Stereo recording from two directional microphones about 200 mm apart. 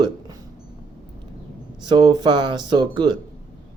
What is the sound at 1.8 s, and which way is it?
Speech, 20° right (ahead or behind).